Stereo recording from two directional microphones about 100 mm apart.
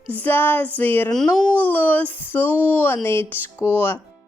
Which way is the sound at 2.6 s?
20° left (ahead or behind).